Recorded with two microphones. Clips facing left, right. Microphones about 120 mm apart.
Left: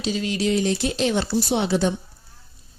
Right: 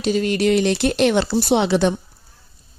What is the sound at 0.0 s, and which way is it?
Speech, 55° right (ahead or behind).